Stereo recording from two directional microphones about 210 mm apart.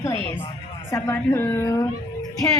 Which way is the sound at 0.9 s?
10° left (ahead or behind).